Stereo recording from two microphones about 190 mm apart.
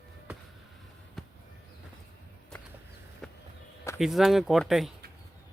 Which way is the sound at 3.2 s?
5° left (ahead or behind).